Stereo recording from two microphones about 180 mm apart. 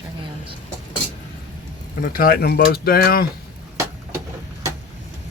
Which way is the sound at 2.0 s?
55° left (ahead or behind).